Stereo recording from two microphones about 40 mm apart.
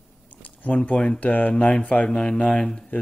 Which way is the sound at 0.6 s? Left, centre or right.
Left.